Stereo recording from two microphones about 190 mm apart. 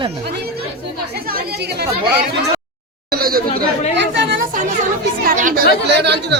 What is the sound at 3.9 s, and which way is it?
Speech, 65° right (ahead or behind).